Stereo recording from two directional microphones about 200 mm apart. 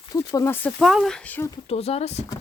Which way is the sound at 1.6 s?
30° left (ahead or behind).